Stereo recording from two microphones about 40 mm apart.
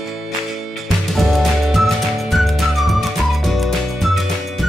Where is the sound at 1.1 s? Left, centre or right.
Centre.